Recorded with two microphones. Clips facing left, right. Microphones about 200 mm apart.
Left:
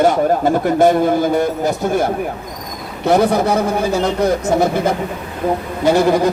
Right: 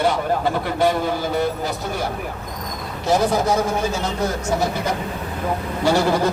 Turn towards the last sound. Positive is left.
turn(degrees=15)  # may be behind; listen again after turning